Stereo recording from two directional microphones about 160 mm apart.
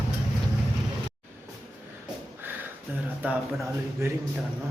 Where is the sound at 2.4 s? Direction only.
10° right (ahead or behind).